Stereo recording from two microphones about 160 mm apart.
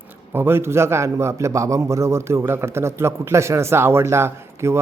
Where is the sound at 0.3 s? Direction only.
15° right (ahead or behind).